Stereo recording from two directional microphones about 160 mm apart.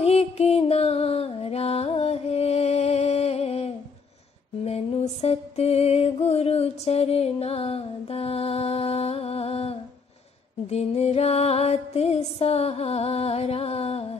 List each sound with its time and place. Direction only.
0.0 s music: 40° left (ahead or behind)